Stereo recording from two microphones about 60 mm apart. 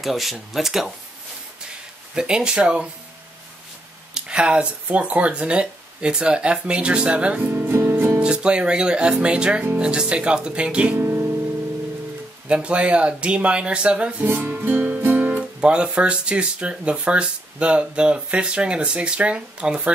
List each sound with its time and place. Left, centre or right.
0.0 s speech: centre
2.1 s speech: centre
4.1 s speech: centre
7.5 s music: right
8.2 s speech: centre
11.0 s guitar: right
12.4 s speech: centre
14.2 s music: right
15.6 s speech: centre